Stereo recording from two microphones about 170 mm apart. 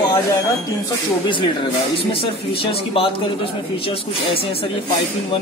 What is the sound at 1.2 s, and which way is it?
A man's voice, 30° left (ahead or behind).